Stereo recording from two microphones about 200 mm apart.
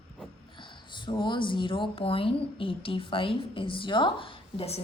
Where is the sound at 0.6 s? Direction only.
25° left (ahead or behind).